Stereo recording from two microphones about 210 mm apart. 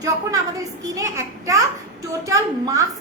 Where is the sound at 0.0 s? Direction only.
15° right (ahead or behind).